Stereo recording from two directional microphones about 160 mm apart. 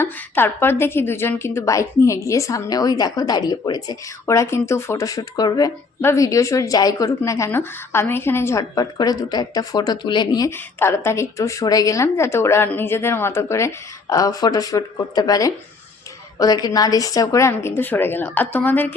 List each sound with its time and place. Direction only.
0.0 s a woman's voice: 15° left (ahead or behind)